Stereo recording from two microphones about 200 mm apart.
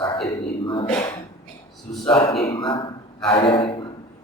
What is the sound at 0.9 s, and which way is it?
A man's voice, 10° left (ahead or behind).